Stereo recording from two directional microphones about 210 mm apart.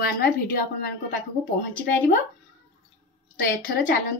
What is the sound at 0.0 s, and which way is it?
Speech, 45° left (ahead or behind).